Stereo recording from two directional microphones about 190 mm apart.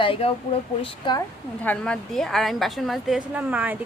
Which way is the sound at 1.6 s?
5° left (ahead or behind).